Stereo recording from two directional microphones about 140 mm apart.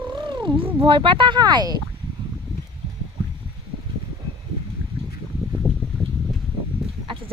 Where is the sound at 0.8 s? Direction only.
40° right (ahead or behind).